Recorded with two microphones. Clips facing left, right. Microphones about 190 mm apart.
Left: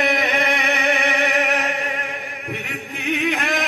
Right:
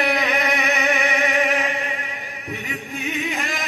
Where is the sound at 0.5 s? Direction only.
60° left (ahead or behind).